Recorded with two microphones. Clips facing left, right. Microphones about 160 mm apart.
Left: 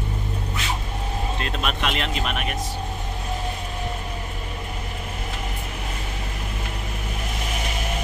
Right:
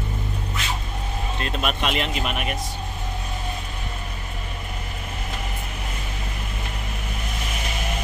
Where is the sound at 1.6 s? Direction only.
5° right (ahead or behind).